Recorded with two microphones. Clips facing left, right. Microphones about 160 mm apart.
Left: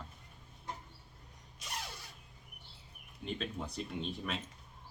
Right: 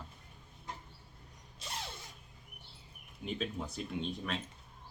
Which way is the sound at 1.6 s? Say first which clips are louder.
Right 1 dB; 30° right (ahead or behind).